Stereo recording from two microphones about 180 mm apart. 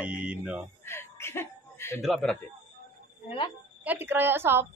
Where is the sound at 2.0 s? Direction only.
Centre (ahead or behind).